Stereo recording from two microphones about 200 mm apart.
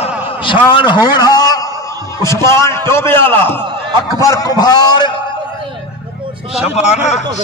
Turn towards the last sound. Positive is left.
turn(degrees=35)  # may be behind; listen again after turning